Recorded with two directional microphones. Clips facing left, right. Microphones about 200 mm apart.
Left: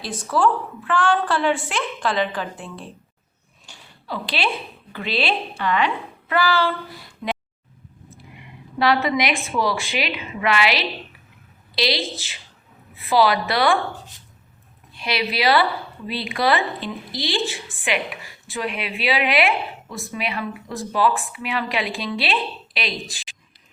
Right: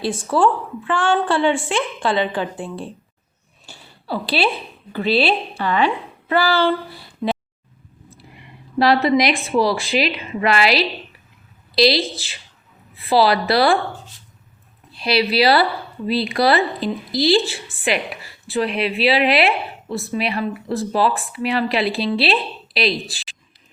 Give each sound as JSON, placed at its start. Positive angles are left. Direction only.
{"t": 0.0, "sound": "a woman's voice", "side_deg": -30}
{"t": 4.0, "sound": "a woman's voice", "side_deg": -35}
{"t": 14.9, "sound": "a woman's voice", "side_deg": -35}